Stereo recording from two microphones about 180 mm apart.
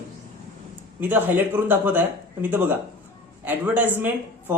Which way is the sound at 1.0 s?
10° right (ahead or behind).